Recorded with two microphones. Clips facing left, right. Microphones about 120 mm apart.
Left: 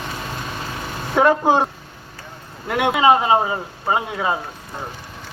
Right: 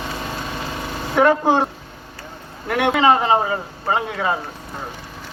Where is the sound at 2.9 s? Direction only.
15° left (ahead or behind).